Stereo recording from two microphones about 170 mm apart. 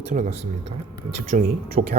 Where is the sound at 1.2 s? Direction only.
45° right (ahead or behind).